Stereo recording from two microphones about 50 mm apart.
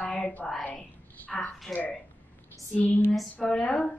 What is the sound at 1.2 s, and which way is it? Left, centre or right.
Speech, left.